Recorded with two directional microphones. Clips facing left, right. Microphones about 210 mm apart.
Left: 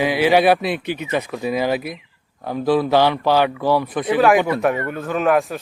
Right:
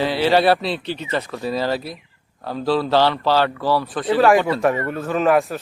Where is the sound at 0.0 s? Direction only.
15° left (ahead or behind).